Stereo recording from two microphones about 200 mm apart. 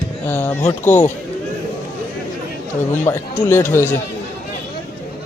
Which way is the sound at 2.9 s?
10° left (ahead or behind).